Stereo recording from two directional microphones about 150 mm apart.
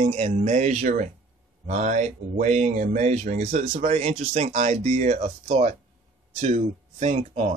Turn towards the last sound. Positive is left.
turn(degrees=-45)  # may be behind; listen again after turning